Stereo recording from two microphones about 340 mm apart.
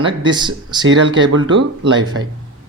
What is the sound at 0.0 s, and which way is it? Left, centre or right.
Speech, centre.